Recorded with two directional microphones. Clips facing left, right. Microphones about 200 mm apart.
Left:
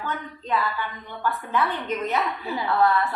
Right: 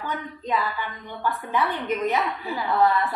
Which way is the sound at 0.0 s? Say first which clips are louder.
Right 1 dB; 15° right (ahead or behind).